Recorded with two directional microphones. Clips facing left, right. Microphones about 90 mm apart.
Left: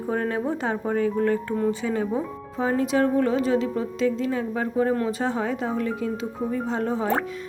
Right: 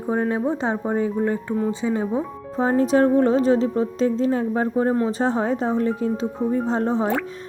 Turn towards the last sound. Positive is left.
turn(degrees=-30)  # may be behind; listen again after turning